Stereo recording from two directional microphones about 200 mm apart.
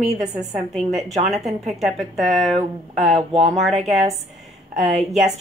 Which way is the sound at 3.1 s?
35° right (ahead or behind).